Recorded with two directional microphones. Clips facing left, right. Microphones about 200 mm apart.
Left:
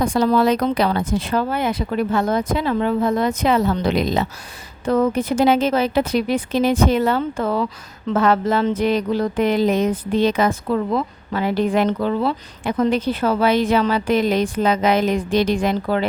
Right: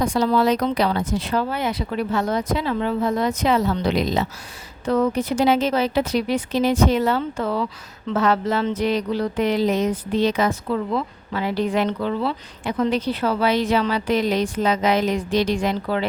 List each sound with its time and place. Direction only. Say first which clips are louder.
0.0 s speech: left 2 dB; 55° left (ahead or behind)